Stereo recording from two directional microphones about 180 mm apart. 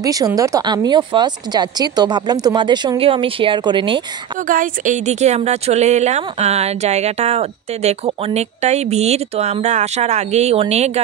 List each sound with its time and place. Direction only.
0.0 s speech: 20° right (ahead or behind)
4.5 s a woman's voice: 45° right (ahead or behind)